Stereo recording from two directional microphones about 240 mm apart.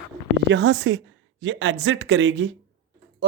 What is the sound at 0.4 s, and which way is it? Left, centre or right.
Speech, right.